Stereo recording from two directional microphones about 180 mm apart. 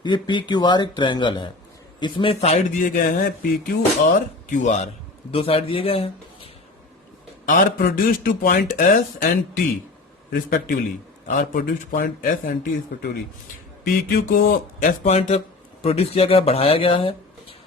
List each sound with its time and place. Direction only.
0.0 s speech: 25° left (ahead or behind)
7.4 s speech: 50° left (ahead or behind)
10.3 s a man's voice: 55° left (ahead or behind)
13.8 s speech: 55° left (ahead or behind); by 17.2 s 30° left (ahead or behind)